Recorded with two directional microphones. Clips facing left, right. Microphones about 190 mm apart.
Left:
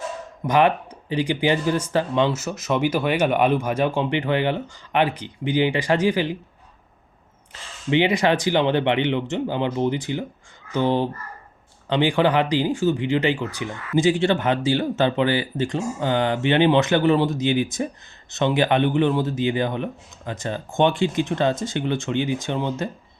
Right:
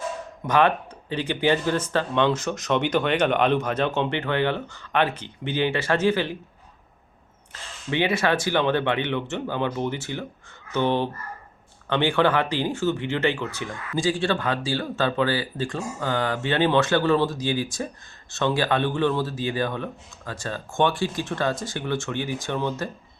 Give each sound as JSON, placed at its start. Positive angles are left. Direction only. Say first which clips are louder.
{"t": 0.4, "sound": "speech", "louder": "left 2 dB", "side_deg": 10}
{"t": 7.9, "sound": "a man's voice", "louder": "left 4 dB", "side_deg": 15}